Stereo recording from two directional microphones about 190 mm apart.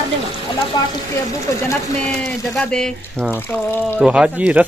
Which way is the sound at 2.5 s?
5° left (ahead or behind).